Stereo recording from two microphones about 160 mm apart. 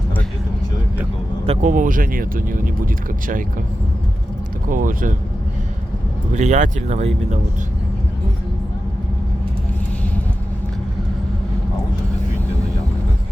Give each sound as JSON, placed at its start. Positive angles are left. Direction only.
{"t": 1.5, "sound": "speech", "side_deg": -50}
{"t": 4.7, "sound": "speech", "side_deg": -55}
{"t": 6.3, "sound": "speech", "side_deg": -45}